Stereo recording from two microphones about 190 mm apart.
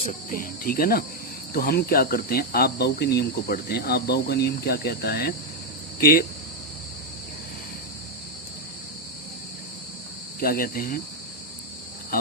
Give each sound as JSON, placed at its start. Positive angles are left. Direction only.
{"t": 0.3, "sound": "speech", "side_deg": 50}
{"t": 1.5, "sound": "cricket", "side_deg": 55}
{"t": 6.0, "sound": "speech", "side_deg": 55}
{"t": 10.4, "sound": "speech", "side_deg": 50}